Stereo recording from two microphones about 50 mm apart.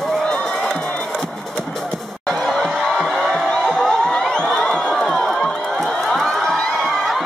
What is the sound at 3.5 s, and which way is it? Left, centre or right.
Crowd, centre.